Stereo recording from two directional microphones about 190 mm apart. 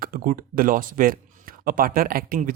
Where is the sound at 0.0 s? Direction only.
50° right (ahead or behind).